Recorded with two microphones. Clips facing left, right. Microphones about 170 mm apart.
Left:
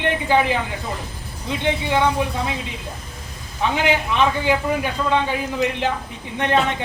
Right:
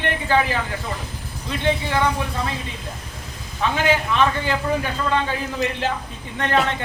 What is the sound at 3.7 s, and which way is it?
A man's voice, 15° left (ahead or behind).